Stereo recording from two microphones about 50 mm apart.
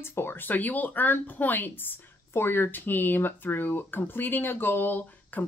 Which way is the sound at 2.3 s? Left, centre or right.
Left.